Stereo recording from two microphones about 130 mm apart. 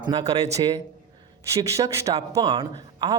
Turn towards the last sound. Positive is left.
turn(degrees=-30)  # may be behind; listen again after turning